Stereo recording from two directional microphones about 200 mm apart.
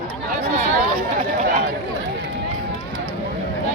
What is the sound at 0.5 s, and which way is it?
Chatter, 40° right (ahead or behind).